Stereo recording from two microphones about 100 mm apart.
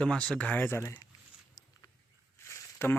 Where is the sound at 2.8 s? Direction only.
25° left (ahead or behind).